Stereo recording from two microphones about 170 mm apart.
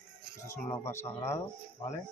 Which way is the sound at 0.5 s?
15° left (ahead or behind).